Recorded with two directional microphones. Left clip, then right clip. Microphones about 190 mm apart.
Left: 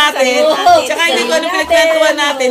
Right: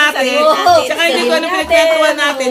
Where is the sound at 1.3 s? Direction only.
50° left (ahead or behind).